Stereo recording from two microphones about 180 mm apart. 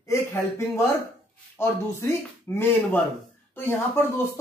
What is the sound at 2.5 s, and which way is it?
Speech, 10° left (ahead or behind).